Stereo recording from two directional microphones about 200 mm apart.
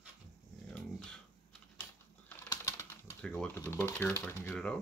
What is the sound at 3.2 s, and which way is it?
Speech, 5° left (ahead or behind).